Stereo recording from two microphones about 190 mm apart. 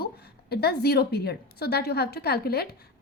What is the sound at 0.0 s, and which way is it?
A woman's voice, 55° left (ahead or behind).